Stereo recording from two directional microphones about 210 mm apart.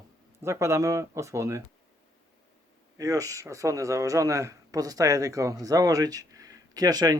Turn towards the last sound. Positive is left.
turn(degrees=-20)  # may be behind; listen again after turning